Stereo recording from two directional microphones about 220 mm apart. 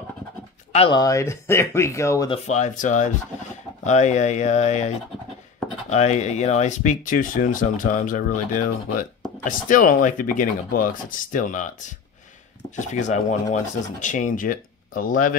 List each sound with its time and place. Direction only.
0.7 s speech: 20° left (ahead or behind); by 15.3 s 35° left (ahead or behind)